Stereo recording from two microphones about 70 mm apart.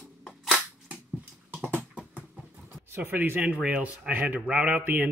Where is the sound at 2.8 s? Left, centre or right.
Right.